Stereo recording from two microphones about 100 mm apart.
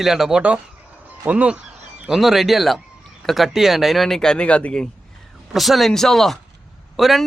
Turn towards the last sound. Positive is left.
turn(degrees=0)  # may be behind; listen again after turning